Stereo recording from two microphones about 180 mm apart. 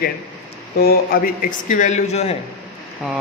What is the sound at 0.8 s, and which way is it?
A man's voice, 55° left (ahead or behind).